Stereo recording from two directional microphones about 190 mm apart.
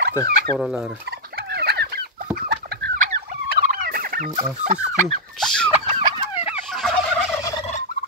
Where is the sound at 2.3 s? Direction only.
55° right (ahead or behind).